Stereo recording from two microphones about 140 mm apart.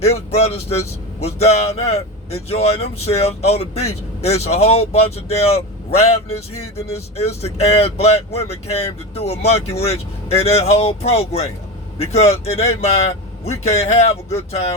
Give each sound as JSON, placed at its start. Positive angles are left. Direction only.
{"t": 0.0, "sound": "speech", "side_deg": 45}